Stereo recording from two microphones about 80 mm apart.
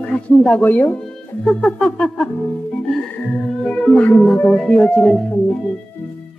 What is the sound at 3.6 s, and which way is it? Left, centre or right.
Speech, centre.